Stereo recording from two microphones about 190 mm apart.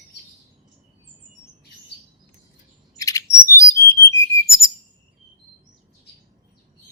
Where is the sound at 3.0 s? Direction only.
15° left (ahead or behind).